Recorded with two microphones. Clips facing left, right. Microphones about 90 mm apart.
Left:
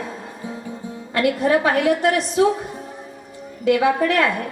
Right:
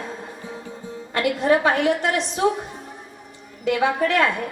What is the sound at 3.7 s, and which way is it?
Speech, 25° right (ahead or behind).